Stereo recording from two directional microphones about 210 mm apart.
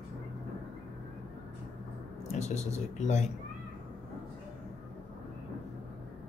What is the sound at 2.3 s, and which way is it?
Speech, 30° left (ahead or behind).